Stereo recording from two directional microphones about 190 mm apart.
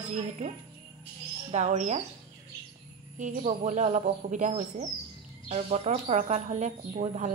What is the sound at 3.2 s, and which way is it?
Speech, 40° right (ahead or behind).